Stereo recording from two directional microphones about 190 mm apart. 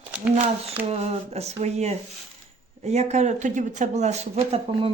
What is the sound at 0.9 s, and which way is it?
Speech, 35° right (ahead or behind).